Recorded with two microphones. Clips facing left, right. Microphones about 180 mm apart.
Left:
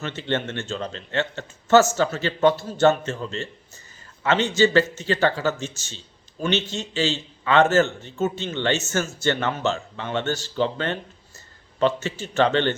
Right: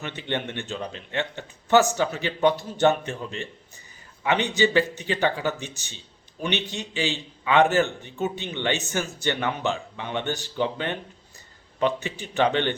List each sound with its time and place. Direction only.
0.0 s a man's voice: 15° right (ahead or behind)